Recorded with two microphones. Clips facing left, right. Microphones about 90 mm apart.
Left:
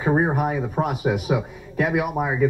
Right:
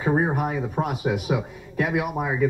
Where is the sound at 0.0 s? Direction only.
20° left (ahead or behind).